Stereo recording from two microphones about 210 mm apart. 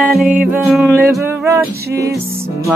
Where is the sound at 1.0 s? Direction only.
15° right (ahead or behind).